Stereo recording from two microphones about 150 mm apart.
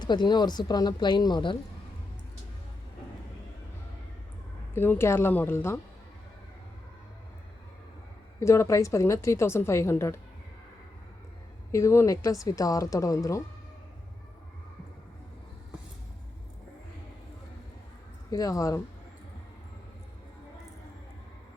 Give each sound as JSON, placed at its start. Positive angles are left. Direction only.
{"t": 0.0, "sound": "a woman's voice", "side_deg": 30}
{"t": 4.7, "sound": "a woman's voice", "side_deg": 15}
{"t": 8.4, "sound": "a woman's voice", "side_deg": 20}
{"t": 11.7, "sound": "a woman's voice", "side_deg": 20}
{"t": 18.3, "sound": "a woman's voice", "side_deg": 25}